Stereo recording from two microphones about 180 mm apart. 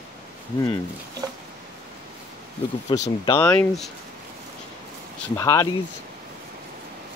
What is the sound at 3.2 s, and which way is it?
Speech, 15° left (ahead or behind).